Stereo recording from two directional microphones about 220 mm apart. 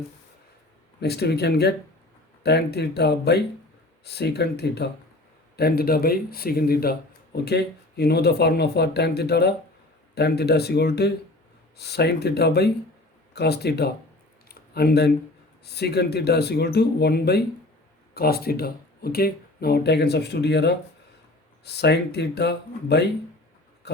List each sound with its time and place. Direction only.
1.0 s speech: 45° left (ahead or behind)
14.4 s a sound: 45° left (ahead or behind)
15.6 s speech: 45° left (ahead or behind)
23.8 s dog: 50° left (ahead or behind)